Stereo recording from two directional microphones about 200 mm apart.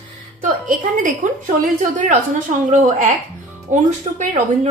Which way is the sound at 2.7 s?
35° right (ahead or behind).